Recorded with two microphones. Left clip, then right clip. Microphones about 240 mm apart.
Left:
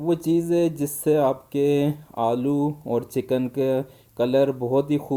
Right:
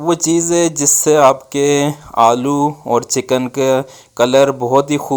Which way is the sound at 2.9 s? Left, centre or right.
Centre.